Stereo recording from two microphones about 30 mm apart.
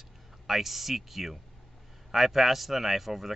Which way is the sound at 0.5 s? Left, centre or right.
Centre.